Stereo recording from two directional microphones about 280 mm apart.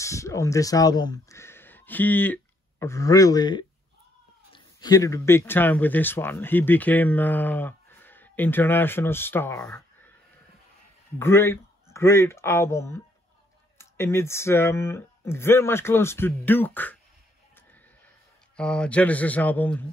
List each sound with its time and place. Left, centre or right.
0.0 s speech: centre
11.1 s speech: centre
18.6 s speech: centre